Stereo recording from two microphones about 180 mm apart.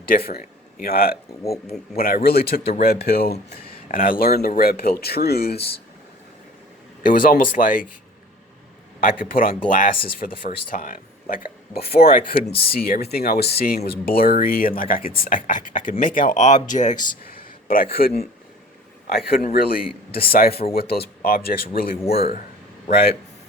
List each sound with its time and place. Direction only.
0.1 s speech: 55° left (ahead or behind)
7.0 s speech: 50° left (ahead or behind)
9.3 s a man's voice: 50° left (ahead or behind)
22.9 s speech: 55° left (ahead or behind)